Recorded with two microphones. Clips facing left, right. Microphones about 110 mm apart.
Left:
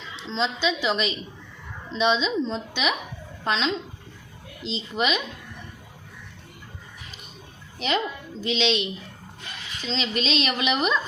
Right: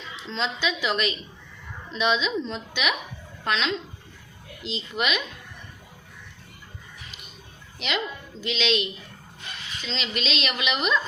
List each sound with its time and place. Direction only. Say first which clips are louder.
0.2 s a woman's voice: left 3 dB; 30° left (ahead or behind)
4.9 s speech: left 2 dB; 30° left (ahead or behind)
7.8 s speech: left 4 dB; 35° left (ahead or behind)